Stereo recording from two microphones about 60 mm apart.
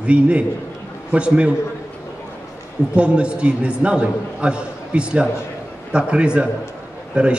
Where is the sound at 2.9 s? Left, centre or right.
Centre.